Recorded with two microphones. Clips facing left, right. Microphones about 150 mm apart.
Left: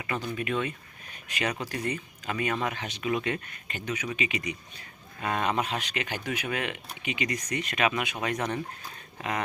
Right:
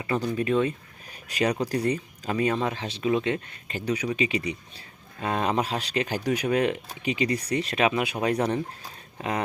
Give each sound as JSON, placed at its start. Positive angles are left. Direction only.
{"t": 0.0, "sound": "speech", "side_deg": -35}